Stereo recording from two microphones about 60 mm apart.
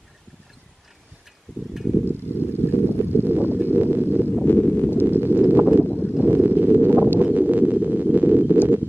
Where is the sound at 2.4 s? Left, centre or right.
Left.